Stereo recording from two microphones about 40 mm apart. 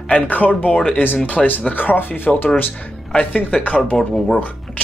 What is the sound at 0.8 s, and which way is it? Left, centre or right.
Speech, left.